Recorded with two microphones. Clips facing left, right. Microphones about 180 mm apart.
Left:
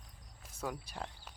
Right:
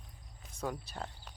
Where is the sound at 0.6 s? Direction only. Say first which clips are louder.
Right 2 dB; centre (ahead or behind).